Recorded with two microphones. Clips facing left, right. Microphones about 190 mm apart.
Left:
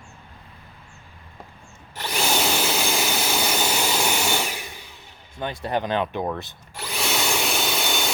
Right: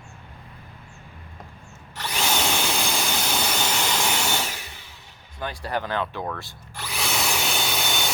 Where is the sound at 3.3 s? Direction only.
10° left (ahead or behind).